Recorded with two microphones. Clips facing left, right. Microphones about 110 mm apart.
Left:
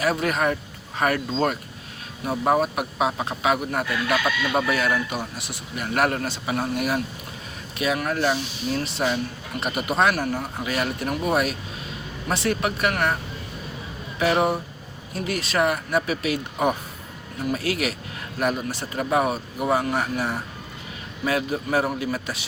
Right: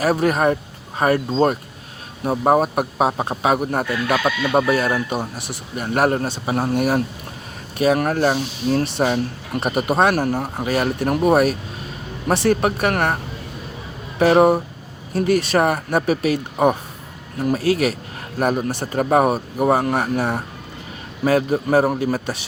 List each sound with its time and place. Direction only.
0.0 s speech: 40° right (ahead or behind)
14.2 s speech: 40° right (ahead or behind)